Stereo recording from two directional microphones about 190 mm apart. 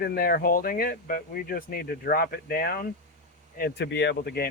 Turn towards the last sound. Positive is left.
turn(degrees=60)  # may be behind; listen again after turning